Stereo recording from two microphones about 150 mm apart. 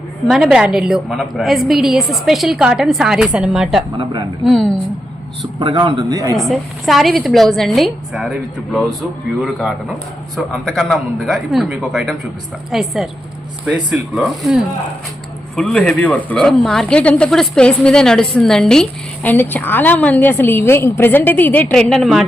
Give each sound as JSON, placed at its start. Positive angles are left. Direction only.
{"t": 0.3, "sound": "a woman's voice", "side_deg": -5}
{"t": 3.9, "sound": "speech", "side_deg": -30}
{"t": 5.5, "sound": "speech", "side_deg": -30}
{"t": 6.3, "sound": "a woman's voice", "side_deg": 0}